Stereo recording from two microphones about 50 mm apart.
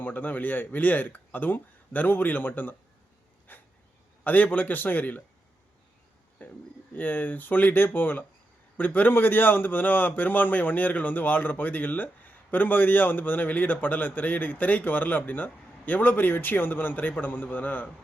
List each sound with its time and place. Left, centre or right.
0.0 s a man's voice: left
3.5 s a sound: left
4.2 s a man's voice: left
6.4 s a man's voice: left